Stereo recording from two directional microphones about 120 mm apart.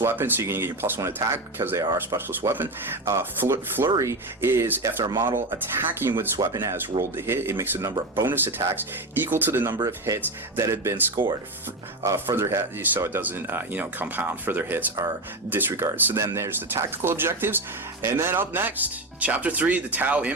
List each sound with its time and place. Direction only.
0.0 s speech: 20° right (ahead or behind)
9.7 s speech: 35° right (ahead or behind)
10.2 s speech: 25° right (ahead or behind)